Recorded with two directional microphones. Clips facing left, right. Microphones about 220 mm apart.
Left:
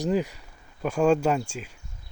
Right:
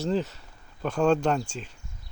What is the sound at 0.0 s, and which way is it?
Speech, 15° left (ahead or behind).